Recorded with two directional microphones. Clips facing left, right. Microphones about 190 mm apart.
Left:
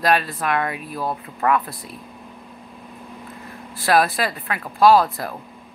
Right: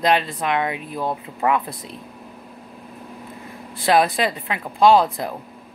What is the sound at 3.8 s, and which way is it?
Speech, 20° right (ahead or behind).